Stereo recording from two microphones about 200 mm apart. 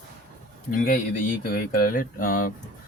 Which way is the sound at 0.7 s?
45° left (ahead or behind).